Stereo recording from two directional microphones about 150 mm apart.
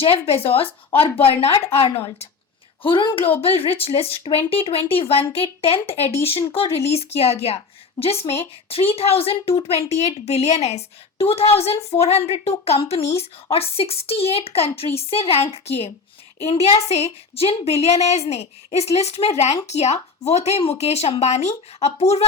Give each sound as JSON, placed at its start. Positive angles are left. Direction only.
{"t": 0.0, "sound": "a woman's voice", "side_deg": 40}
{"t": 2.8, "sound": "a woman's voice", "side_deg": 35}
{"t": 5.9, "sound": "speech", "side_deg": 15}
{"t": 6.7, "sound": "a woman's voice", "side_deg": 40}